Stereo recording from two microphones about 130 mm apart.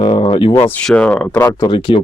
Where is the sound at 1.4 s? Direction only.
30° left (ahead or behind).